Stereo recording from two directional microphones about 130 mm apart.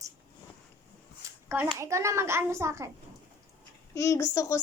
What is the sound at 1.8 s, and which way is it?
A child's voice, 20° right (ahead or behind).